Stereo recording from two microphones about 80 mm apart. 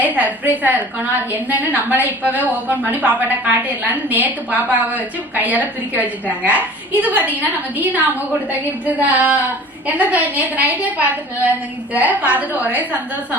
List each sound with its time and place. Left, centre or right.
0.0 s a woman's voice: right